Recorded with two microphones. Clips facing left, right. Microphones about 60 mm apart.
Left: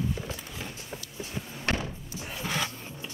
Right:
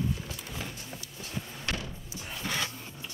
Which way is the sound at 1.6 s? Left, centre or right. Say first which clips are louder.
Left 8 dB; left.